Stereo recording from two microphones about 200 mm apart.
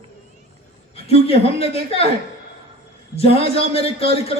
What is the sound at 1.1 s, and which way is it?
A man's voice, 30° left (ahead or behind).